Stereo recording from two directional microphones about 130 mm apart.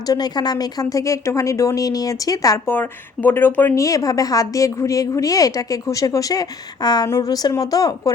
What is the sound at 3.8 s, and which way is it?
A woman's voice, 25° left (ahead or behind).